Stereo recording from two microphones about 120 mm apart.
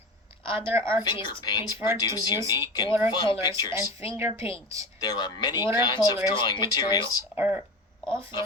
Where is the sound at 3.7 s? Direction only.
25° right (ahead or behind).